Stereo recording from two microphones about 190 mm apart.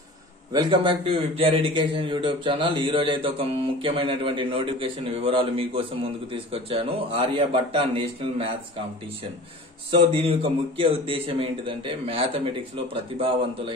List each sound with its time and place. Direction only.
0.5 s a man's voice: 20° right (ahead or behind)
9.8 s a man's voice: 30° right (ahead or behind)